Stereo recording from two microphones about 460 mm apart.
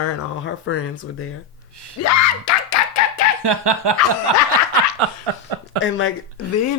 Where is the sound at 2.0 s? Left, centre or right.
Left.